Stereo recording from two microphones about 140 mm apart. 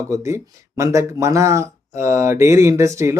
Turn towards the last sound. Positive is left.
turn(degrees=-20)  # may be behind; listen again after turning